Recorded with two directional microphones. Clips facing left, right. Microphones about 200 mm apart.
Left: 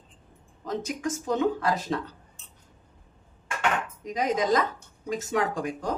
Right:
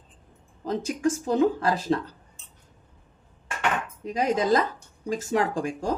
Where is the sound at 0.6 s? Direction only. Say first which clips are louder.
Right 5 dB; 30° right (ahead or behind).